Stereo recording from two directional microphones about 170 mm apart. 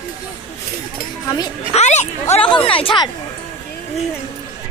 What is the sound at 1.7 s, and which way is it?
Speech, 40° left (ahead or behind).